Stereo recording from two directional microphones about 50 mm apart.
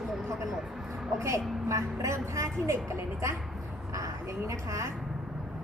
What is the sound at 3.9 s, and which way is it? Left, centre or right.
A woman's voice, right.